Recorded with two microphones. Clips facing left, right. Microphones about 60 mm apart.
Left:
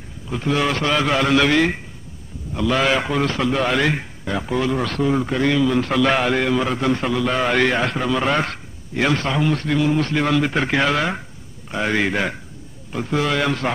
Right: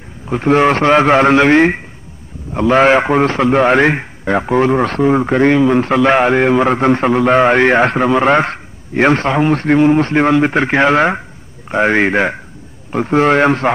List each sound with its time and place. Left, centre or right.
0.3 s a man's voice: right